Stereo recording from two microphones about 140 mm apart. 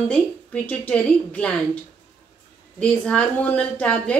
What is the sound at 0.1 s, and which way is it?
Speech, 10° left (ahead or behind).